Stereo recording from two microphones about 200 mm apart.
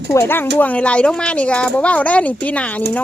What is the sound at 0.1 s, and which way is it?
Speech, 10° left (ahead or behind).